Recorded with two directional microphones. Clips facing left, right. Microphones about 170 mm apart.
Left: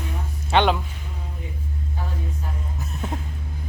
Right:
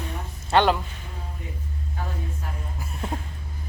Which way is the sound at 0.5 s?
Centre (ahead or behind).